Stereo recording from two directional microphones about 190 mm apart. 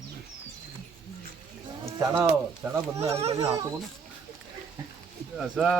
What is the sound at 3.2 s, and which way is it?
Speech, 35° right (ahead or behind).